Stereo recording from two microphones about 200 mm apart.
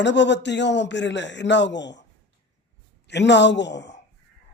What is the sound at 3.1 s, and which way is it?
Speech, 60° left (ahead or behind).